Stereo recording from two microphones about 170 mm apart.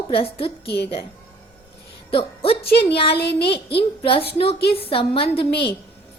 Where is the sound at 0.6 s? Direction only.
75° left (ahead or behind).